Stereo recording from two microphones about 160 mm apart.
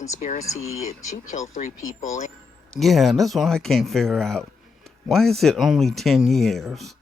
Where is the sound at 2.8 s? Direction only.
Centre (ahead or behind).